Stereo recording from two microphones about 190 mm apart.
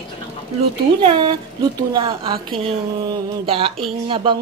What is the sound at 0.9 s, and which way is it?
A woman's voice, 25° right (ahead or behind).